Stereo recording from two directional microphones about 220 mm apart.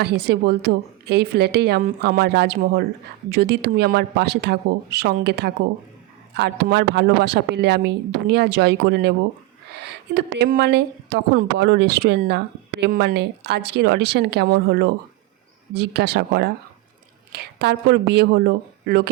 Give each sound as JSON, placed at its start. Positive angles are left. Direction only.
{"t": 0.0, "sound": "a woman's voice", "side_deg": -45}